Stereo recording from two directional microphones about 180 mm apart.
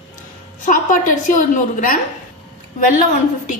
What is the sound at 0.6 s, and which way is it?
A woman's voice, 45° left (ahead or behind).